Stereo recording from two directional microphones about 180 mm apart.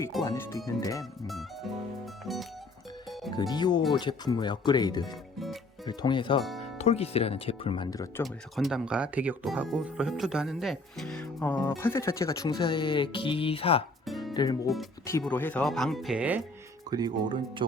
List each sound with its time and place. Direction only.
0.3 s speech: 15° left (ahead or behind)
2.2 s speech: centre (ahead or behind)
3.2 s speech: 20° left (ahead or behind)
8.2 s speech: centre (ahead or behind); by 13.8 s 30° left (ahead or behind)
14.1 s music: centre (ahead or behind)
14.3 s speech: 20° left (ahead or behind)
15.2 s speech: 10° left (ahead or behind); by 16.4 s 10° right (ahead or behind)
16.9 s speech: 25° right (ahead or behind)